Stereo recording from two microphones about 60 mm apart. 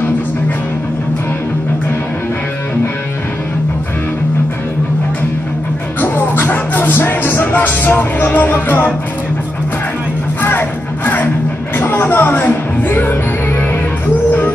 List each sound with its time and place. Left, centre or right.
5.9 s music: left
11.8 s music: left